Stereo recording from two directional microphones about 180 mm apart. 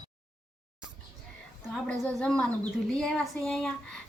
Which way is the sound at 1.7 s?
5° left (ahead or behind).